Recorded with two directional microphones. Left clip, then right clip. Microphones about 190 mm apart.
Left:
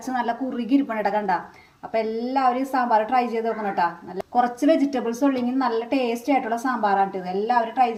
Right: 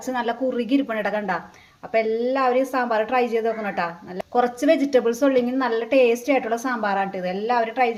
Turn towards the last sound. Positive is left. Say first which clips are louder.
# left 1 dB
turn(degrees=-20)  # may be behind; listen again after turning